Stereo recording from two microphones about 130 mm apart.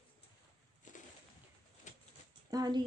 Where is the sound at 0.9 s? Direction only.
70° left (ahead or behind).